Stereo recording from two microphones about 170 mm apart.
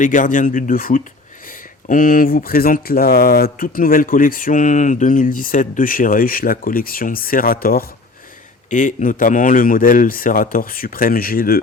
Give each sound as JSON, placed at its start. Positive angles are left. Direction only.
{"t": 0.0, "sound": "speech", "side_deg": 50}
{"t": 8.7, "sound": "speech", "side_deg": 50}